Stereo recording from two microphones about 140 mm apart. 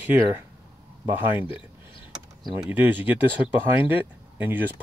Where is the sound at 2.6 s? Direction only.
10° right (ahead or behind).